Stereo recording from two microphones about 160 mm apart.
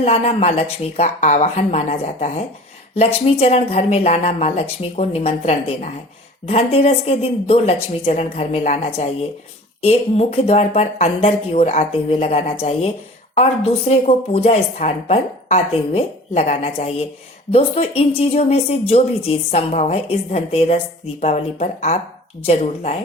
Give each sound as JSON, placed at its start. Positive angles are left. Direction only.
{"t": 0.0, "sound": "a woman's voice", "side_deg": 40}